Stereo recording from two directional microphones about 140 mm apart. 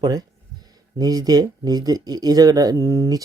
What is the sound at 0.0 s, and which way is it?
Speech, 30° right (ahead or behind).